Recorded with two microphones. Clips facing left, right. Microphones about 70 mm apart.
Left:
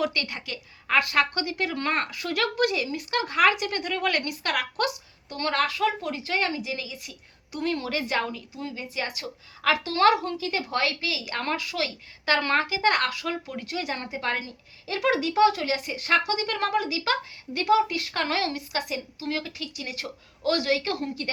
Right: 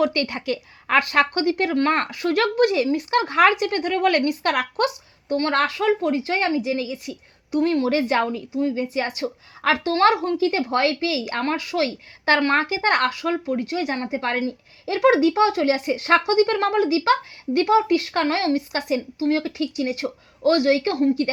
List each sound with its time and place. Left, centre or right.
0.0 s speech: right
1.3 s speech: right
11.5 s speech: right
13.5 s speech: right
14.8 s a child's voice: right
16.7 s speech: right